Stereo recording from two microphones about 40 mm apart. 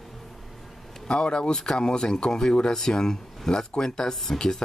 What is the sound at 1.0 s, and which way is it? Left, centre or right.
Speech, centre.